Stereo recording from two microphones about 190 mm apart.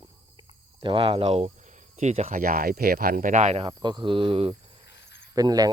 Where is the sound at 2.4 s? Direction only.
50° right (ahead or behind).